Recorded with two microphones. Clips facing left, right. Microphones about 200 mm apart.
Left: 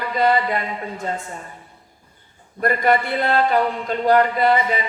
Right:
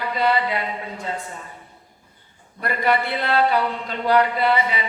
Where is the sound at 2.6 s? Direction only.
45° left (ahead or behind).